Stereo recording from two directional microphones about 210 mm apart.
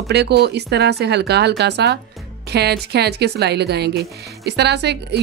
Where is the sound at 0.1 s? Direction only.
50° right (ahead or behind).